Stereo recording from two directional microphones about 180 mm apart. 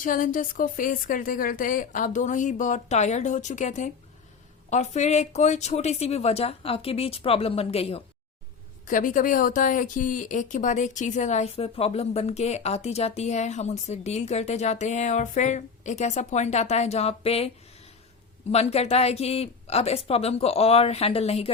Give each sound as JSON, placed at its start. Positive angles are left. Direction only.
{"t": 0.0, "sound": "speech", "side_deg": 45}
{"t": 8.9, "sound": "speech", "side_deg": 45}
{"t": 18.5, "sound": "speech", "side_deg": 35}